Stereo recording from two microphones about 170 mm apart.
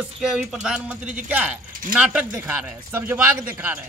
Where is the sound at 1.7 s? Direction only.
55° right (ahead or behind).